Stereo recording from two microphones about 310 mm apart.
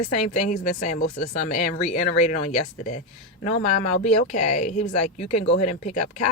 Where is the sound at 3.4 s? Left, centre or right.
Left.